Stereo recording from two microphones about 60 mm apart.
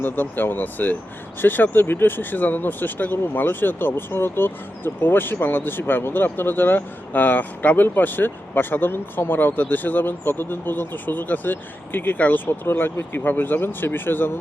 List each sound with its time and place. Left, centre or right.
0.0 s speech: left